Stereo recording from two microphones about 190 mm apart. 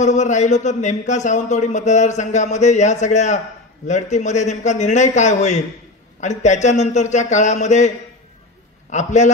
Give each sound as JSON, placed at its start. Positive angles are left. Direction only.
{"t": 0.0, "sound": "a man's voice", "side_deg": 40}
{"t": 8.9, "sound": "a man's voice", "side_deg": 40}